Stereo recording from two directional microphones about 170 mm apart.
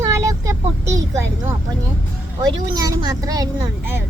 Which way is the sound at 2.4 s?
25° right (ahead or behind).